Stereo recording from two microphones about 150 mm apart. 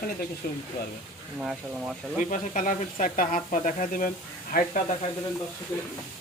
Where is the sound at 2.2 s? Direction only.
55° left (ahead or behind).